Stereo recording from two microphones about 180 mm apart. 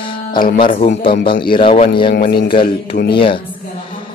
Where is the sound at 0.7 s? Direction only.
50° left (ahead or behind).